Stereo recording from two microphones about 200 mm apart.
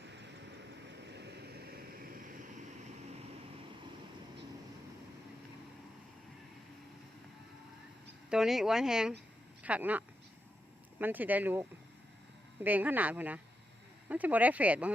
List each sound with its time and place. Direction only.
1.0 s vehicle: 55° right (ahead or behind)
8.3 s speech: centre (ahead or behind)
11.0 s speech: 10° right (ahead or behind)
12.6 s speech: 10° right (ahead or behind)